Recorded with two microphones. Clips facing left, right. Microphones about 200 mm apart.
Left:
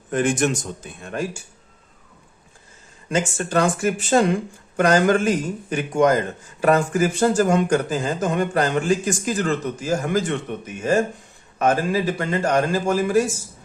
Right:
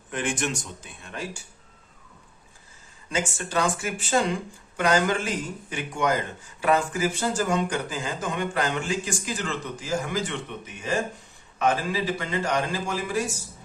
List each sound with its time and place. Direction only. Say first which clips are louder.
0.1 s speech: left 8 dB; 40° left (ahead or behind)
3.1 s speech: left 6 dB; 50° left (ahead or behind)